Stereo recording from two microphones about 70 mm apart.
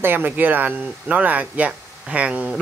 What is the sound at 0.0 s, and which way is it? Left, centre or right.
Speech, right.